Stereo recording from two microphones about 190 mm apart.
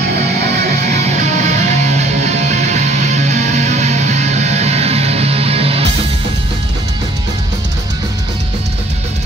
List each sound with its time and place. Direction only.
0.8 s music: 35° right (ahead or behind)